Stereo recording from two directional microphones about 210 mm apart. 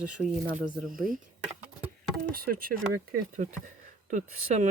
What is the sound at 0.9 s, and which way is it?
Speech, 40° right (ahead or behind).